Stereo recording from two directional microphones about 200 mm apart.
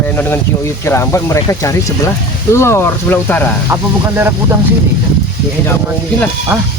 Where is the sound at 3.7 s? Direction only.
15° right (ahead or behind).